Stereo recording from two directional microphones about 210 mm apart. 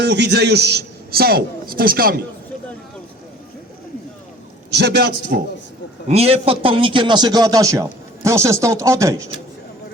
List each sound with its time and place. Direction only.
0.0 s a man's voice: 55° right (ahead or behind)
4.7 s a man's voice: 50° right (ahead or behind)
6.1 s a man's voice: 30° right (ahead or behind)